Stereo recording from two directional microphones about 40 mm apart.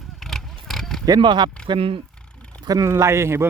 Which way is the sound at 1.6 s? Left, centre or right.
Left.